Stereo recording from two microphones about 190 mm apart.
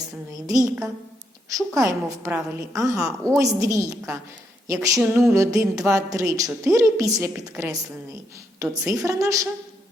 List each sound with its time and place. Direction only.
0.0 s a woman's voice: 20° right (ahead or behind)
8.9 s a woman's voice: 15° right (ahead or behind)